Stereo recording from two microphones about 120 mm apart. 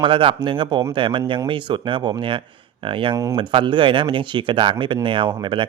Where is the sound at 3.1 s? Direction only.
25° right (ahead or behind).